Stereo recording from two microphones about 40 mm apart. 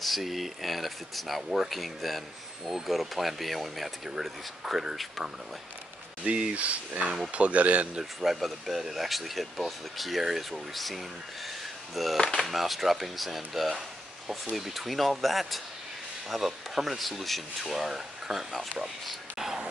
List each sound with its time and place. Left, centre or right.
0.0 s speech: centre
6.2 s speech: right
6.5 s speech: right
7.9 s speech: centre
18.8 s a sound: centre